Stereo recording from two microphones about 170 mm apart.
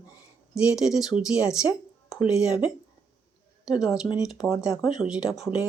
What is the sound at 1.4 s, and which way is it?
Speech, 20° left (ahead or behind).